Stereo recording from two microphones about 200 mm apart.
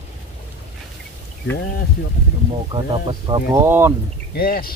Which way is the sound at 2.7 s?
25° right (ahead or behind).